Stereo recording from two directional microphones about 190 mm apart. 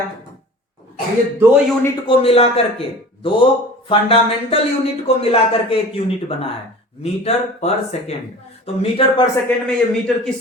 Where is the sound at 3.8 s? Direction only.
30° left (ahead or behind).